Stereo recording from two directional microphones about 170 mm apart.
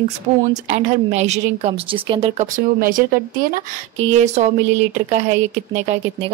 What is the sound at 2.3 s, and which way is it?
Speech, 50° right (ahead or behind).